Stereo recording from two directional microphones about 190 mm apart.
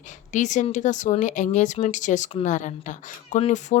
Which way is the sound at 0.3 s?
40° left (ahead or behind).